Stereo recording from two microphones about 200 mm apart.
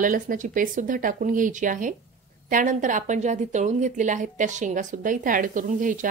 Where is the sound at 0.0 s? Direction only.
40° right (ahead or behind).